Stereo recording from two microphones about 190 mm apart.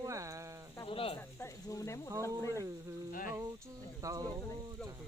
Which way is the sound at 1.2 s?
15° left (ahead or behind).